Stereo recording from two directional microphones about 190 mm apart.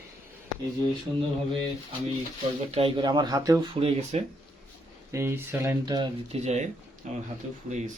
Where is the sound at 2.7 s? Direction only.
25° right (ahead or behind).